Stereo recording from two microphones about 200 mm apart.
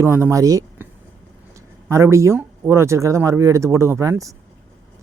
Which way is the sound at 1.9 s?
15° right (ahead or behind).